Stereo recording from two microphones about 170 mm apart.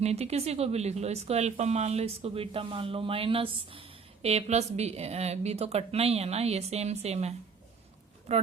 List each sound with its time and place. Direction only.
0.0 s speech: 40° right (ahead or behind)